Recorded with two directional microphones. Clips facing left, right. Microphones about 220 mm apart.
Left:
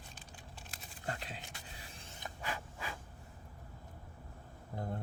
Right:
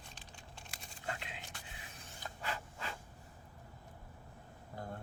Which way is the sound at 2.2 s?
15° left (ahead or behind).